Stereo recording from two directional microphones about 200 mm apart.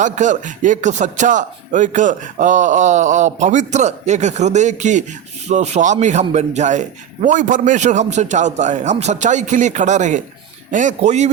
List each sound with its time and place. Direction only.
0.0 s speech: 40° right (ahead or behind)